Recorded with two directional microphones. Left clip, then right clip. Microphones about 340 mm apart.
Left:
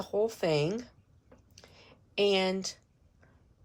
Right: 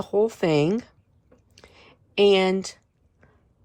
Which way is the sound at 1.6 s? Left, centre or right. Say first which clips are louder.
Right 6 dB; centre.